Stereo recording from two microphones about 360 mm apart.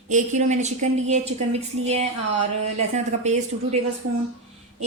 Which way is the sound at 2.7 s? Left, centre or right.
Centre.